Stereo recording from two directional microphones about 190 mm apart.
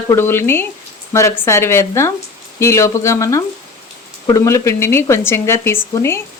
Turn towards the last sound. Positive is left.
turn(degrees=15)  # may be behind; listen again after turning